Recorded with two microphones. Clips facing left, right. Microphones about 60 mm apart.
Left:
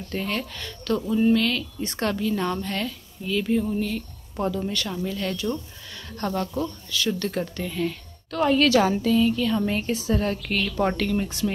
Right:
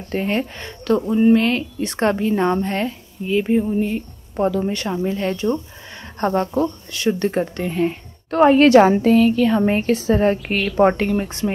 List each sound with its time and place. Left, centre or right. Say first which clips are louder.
0.0 s speech: right 7 dB; right